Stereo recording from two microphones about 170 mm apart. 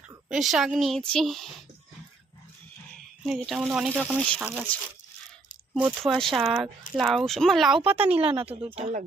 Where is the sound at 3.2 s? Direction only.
Centre (ahead or behind).